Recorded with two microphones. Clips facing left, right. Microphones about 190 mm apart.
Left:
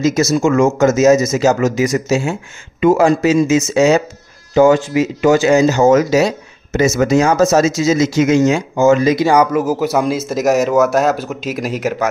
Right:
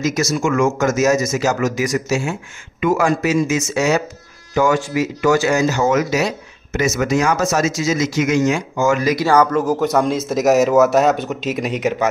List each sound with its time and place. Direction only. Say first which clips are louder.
0.0 s speech: left 5 dB; 25° left (ahead or behind); by 12.1 s centre (ahead or behind)